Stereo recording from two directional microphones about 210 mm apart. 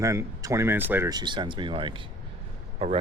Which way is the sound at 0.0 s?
15° right (ahead or behind).